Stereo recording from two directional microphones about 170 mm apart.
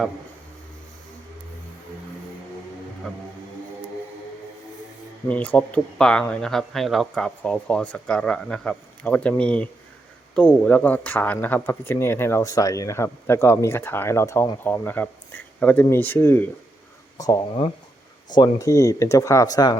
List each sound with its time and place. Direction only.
5.3 s speech: 10° left (ahead or behind)